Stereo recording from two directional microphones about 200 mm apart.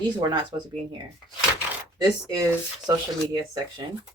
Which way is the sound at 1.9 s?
20° right (ahead or behind).